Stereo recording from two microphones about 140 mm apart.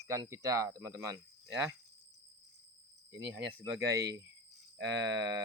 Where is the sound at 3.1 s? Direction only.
20° right (ahead or behind).